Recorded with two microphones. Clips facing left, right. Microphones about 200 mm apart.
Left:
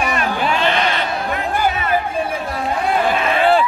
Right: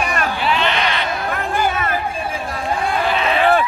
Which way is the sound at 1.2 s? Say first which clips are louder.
Even; 50° right (ahead or behind).